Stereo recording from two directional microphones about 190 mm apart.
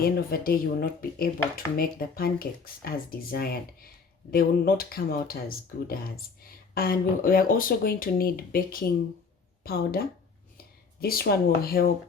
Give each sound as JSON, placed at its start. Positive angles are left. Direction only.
{"t": 0.0, "sound": "speech", "side_deg": 50}
{"t": 11.0, "sound": "speech", "side_deg": 50}